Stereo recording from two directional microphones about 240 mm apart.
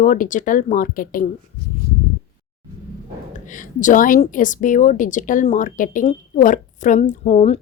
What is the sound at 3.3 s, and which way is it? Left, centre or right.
A woman's voice, left.